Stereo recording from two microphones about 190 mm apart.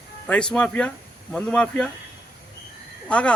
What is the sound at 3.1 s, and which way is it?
Speech, 5° left (ahead or behind).